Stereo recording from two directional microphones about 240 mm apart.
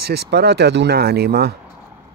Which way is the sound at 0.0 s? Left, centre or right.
Right.